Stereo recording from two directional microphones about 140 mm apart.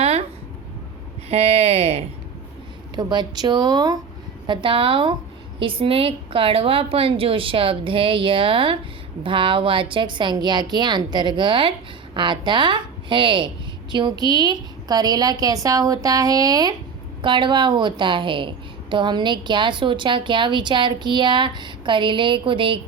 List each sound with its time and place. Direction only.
0.0 s a sound: 45° right (ahead or behind)
1.3 s a woman's voice: 45° right (ahead or behind)
2.9 s a woman's voice: 30° right (ahead or behind)